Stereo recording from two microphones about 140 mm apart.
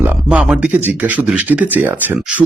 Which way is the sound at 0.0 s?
10° right (ahead or behind).